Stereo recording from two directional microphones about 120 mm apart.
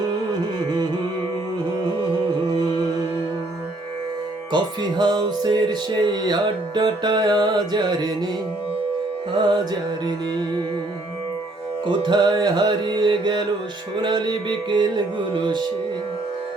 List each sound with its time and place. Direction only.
4.5 s music: 35° right (ahead or behind)
9.3 s music: 40° right (ahead or behind)
11.9 s music: 35° right (ahead or behind)